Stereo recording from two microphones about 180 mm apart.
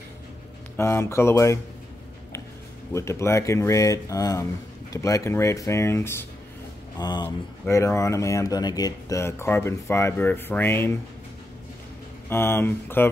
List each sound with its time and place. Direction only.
0.7 s speech: 15° left (ahead or behind)
2.9 s speech: 15° left (ahead or behind)
12.3 s speech: 15° left (ahead or behind)